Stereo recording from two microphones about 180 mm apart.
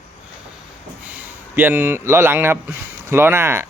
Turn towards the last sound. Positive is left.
turn(degrees=-15)  # may be behind; listen again after turning